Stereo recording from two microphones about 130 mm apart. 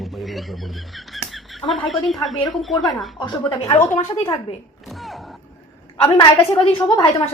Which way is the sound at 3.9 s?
45° left (ahead or behind).